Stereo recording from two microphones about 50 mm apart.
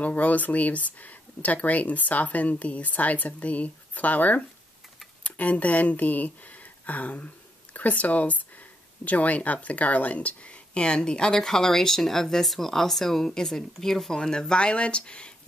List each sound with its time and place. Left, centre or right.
0.0 s speech: left